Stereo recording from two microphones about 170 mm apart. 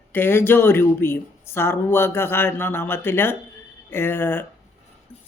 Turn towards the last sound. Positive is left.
turn(degrees=10)  # may be behind; listen again after turning